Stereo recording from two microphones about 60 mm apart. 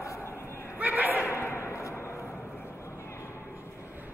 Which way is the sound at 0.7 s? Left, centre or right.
Right.